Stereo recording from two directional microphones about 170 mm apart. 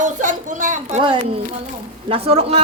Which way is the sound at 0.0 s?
50° right (ahead or behind).